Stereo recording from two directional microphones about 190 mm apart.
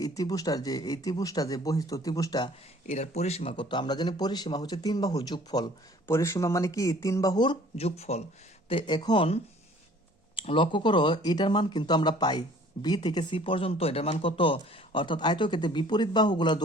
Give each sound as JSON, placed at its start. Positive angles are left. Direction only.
{"t": 0.0, "sound": "speech", "side_deg": 20}
{"t": 2.8, "sound": "speech", "side_deg": 35}
{"t": 8.7, "sound": "speech", "side_deg": 25}